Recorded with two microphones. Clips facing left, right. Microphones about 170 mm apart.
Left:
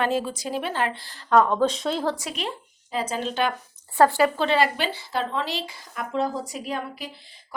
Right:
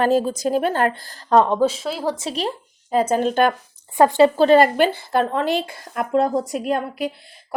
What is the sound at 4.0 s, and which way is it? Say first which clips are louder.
Speech: right 5 dB; 20° right (ahead or behind).